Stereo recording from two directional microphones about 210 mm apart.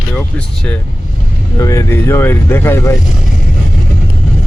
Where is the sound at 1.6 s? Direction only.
15° left (ahead or behind).